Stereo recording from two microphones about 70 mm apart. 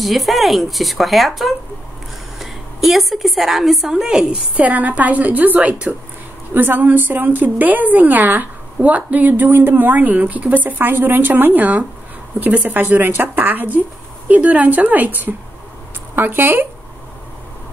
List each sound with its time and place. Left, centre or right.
0.0 s a woman's voice: centre
4.6 s a woman's voice: right